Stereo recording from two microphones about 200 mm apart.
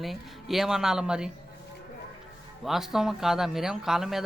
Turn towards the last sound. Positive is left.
turn(degrees=0)  # may be behind; listen again after turning